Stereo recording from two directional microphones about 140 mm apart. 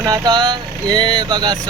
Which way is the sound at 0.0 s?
30° right (ahead or behind).